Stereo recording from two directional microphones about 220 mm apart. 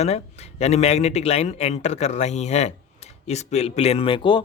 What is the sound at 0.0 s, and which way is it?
Speech, 30° left (ahead or behind).